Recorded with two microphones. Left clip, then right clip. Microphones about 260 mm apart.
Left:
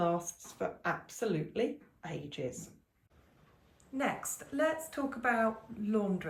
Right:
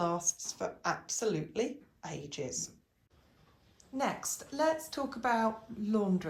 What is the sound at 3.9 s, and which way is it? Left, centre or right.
A woman's voice, centre.